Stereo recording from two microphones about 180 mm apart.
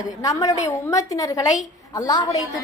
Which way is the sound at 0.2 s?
20° left (ahead or behind).